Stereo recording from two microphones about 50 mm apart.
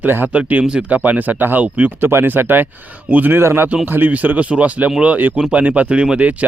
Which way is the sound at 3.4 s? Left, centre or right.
Right.